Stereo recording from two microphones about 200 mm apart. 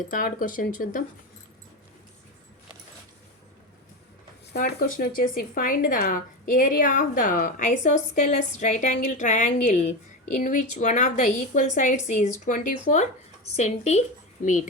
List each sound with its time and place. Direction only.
0.1 s speech: 45° left (ahead or behind)
4.6 s speech: 50° left (ahead or behind); by 14.0 s 35° left (ahead or behind)